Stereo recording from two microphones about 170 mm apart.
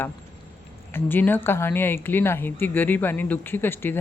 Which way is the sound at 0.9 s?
10° left (ahead or behind).